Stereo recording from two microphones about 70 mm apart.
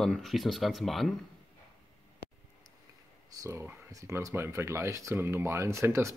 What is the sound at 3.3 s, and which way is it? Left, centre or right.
Speech, right.